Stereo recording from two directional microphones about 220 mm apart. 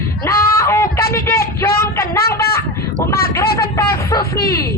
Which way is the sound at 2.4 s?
45° left (ahead or behind).